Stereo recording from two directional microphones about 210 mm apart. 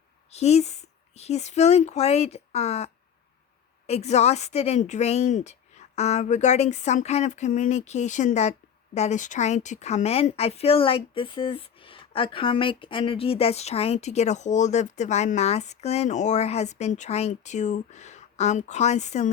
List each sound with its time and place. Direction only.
0.3 s speech: 30° left (ahead or behind)